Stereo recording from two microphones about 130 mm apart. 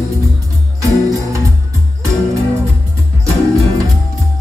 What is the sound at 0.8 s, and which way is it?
Music, 25° right (ahead or behind).